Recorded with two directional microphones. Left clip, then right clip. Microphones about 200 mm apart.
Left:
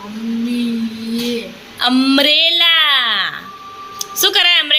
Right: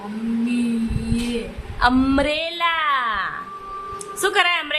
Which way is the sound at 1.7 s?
10° left (ahead or behind).